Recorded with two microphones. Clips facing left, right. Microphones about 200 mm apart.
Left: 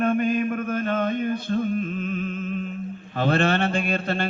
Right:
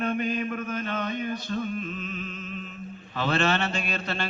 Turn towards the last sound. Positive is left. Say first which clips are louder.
# left 6 dB
turn(degrees=50)  # may be behind; listen again after turning